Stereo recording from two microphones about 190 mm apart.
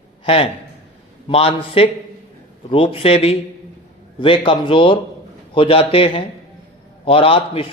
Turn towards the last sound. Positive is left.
turn(degrees=30)  # may be behind; listen again after turning